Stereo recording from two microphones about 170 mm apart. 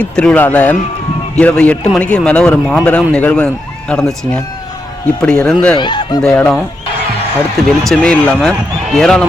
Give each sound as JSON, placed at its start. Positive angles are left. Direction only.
{"t": 0.0, "sound": "a man's voice", "side_deg": 5}
{"t": 5.7, "sound": "speech", "side_deg": 25}
{"t": 6.2, "sound": "speech", "side_deg": 5}
{"t": 7.9, "sound": "speech", "side_deg": 5}